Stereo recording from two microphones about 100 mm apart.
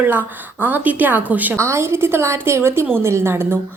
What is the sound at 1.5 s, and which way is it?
A woman's voice, 30° right (ahead or behind).